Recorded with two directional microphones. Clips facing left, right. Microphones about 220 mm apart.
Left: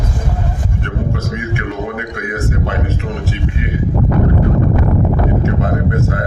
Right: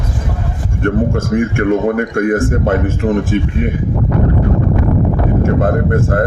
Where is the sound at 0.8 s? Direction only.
50° right (ahead or behind).